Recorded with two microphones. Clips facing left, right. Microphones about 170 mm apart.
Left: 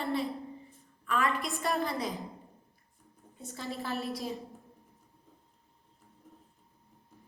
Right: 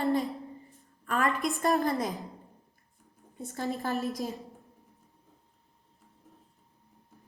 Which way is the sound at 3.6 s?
40° right (ahead or behind).